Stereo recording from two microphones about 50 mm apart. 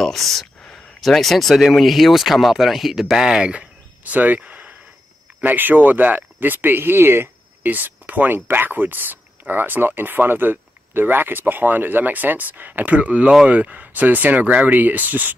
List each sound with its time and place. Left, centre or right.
0.0 s speech: centre; by 4.4 s right
4.4 s a sound: right
5.4 s speech: right
7.6 s speech: right